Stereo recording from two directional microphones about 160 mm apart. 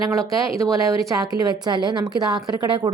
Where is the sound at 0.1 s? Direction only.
20° right (ahead or behind).